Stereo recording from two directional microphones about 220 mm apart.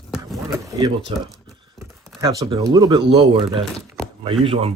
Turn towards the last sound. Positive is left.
turn(degrees=-25)  # may be behind; listen again after turning